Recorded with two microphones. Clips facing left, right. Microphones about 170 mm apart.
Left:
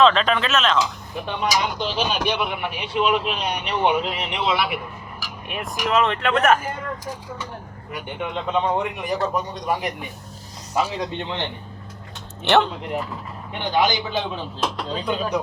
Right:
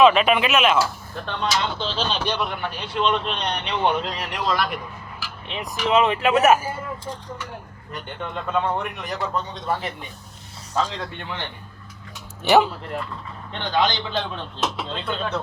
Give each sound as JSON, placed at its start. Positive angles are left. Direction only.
{"t": 0.0, "sound": "speech", "side_deg": -10}
{"t": 0.8, "sound": "speech", "side_deg": 15}
{"t": 2.4, "sound": "speech", "side_deg": 0}
{"t": 6.1, "sound": "speech", "side_deg": -5}
{"t": 7.0, "sound": "speech", "side_deg": 10}
{"t": 12.5, "sound": "speech", "side_deg": -5}
{"t": 13.5, "sound": "speech", "side_deg": 15}
{"t": 15.0, "sound": "speech", "side_deg": 10}